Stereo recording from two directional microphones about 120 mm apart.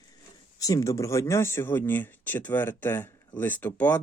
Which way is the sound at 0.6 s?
30° left (ahead or behind).